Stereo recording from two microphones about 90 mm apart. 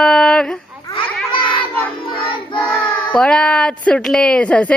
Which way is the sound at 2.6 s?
10° left (ahead or behind).